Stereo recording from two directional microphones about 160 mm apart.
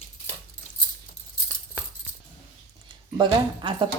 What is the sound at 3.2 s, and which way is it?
Speech, 30° right (ahead or behind).